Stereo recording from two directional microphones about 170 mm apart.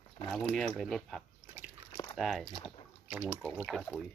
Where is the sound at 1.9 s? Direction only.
20° left (ahead or behind).